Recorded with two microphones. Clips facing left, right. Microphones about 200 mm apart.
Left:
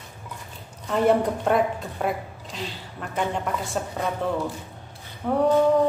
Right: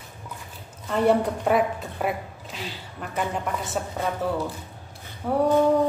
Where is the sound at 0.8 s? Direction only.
Centre (ahead or behind).